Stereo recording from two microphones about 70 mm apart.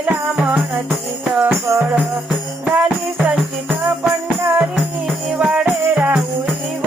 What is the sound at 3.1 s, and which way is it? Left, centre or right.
Music, right.